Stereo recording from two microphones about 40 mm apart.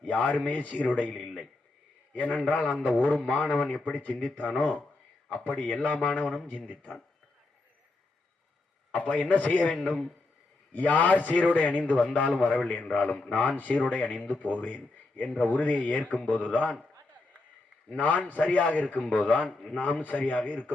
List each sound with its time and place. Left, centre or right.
0.0 s speech: left
1.1 s a man's voice: centre
2.1 s a man's voice: left
4.1 s speech: centre
4.4 s a man's voice: left
8.9 s a man's voice: left
17.9 s a man's voice: left